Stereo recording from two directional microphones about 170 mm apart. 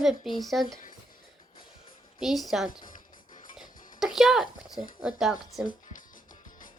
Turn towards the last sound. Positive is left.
turn(degrees=0)  # may be behind; listen again after turning